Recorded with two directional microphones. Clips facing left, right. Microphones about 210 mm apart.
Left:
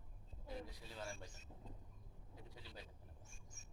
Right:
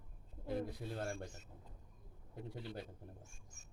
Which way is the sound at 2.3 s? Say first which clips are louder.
Right 11 dB; 60° right (ahead or behind).